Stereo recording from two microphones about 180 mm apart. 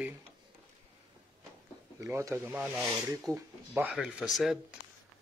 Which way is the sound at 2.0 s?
15° right (ahead or behind).